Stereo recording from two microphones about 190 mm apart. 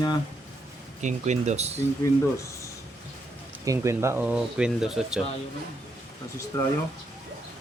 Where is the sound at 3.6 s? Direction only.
15° right (ahead or behind).